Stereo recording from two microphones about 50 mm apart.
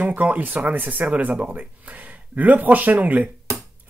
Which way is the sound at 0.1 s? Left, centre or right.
Right.